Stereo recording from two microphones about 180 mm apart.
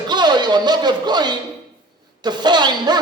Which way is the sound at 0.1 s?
25° right (ahead or behind).